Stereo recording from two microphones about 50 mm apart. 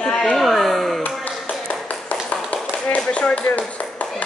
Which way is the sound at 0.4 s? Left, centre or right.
Centre.